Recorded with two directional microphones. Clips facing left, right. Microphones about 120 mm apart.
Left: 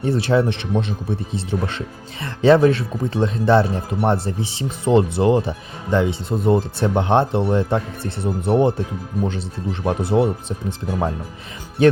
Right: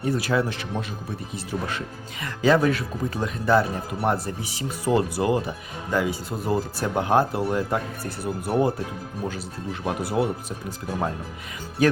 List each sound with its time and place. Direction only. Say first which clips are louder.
0.0 s speech: left 5 dB; 30° left (ahead or behind)
9.8 s speech: left 6 dB; 30° left (ahead or behind)
11.8 s speech: left 6 dB; 25° left (ahead or behind)